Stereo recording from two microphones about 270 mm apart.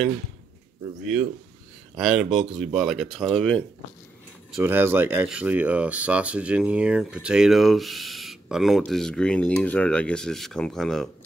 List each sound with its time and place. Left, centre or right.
2.0 s speech: centre